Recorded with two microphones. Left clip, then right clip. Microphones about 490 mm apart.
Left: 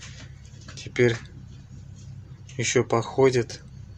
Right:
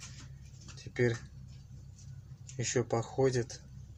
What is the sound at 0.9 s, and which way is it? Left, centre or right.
Speech, left.